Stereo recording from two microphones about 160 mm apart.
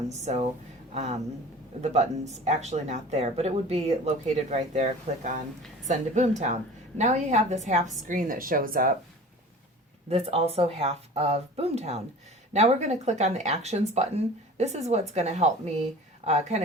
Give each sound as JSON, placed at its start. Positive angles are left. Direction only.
{"t": 0.1, "sound": "speech", "side_deg": -45}
{"t": 10.1, "sound": "speech", "side_deg": -40}